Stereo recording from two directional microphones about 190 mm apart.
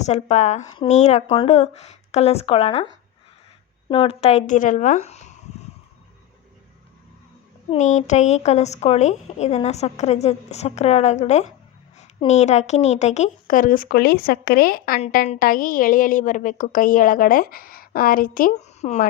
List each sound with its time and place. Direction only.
0.0 s a woman's voice: 35° left (ahead or behind)
3.8 s a woman's voice: 25° left (ahead or behind)
7.7 s a woman's voice: 40° left (ahead or behind)